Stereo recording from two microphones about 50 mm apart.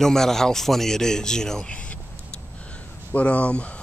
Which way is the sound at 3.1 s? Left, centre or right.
Left.